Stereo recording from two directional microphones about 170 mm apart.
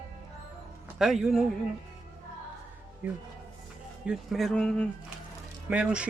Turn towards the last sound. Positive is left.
turn(degrees=-5)  # may be behind; listen again after turning